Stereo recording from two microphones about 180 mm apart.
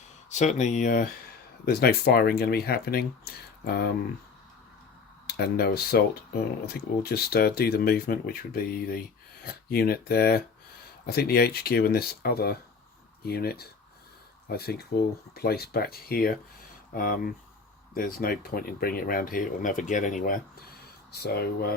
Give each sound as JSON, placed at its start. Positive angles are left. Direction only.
{"t": 0.3, "sound": "speech", "side_deg": 40}
{"t": 1.6, "sound": "speech", "side_deg": 60}
{"t": 5.2, "sound": "speech", "side_deg": 60}
{"t": 21.1, "sound": "speech", "side_deg": 60}